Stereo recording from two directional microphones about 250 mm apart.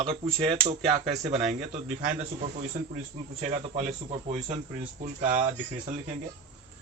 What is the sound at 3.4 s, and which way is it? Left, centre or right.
Speech, right.